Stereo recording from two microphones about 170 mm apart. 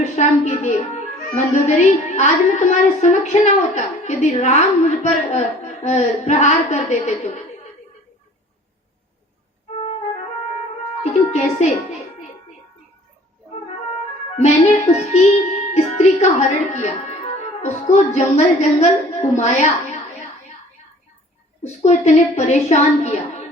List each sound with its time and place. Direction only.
0.0 s a child's voice: 40° left (ahead or behind)
11.0 s a woman's voice: 40° left (ahead or behind)
14.3 s music: 40° left (ahead or behind)
16.7 s speech: 40° left (ahead or behind)
21.6 s a woman's voice: 40° left (ahead or behind)